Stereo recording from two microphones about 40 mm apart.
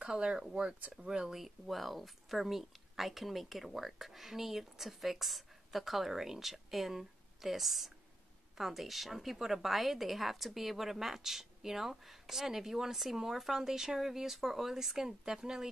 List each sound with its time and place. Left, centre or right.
0.0 s a woman's voice: right
1.3 s a woman's voice: centre